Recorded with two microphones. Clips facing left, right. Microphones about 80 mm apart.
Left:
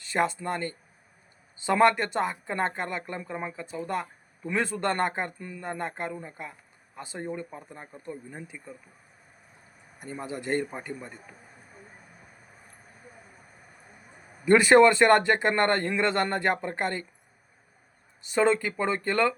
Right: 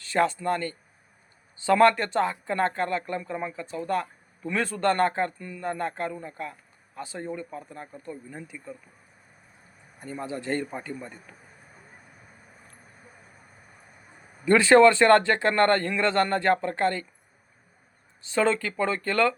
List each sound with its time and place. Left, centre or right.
0.0 s speech: centre
10.2 s speech: centre
14.4 s speech: centre
18.3 s speech: centre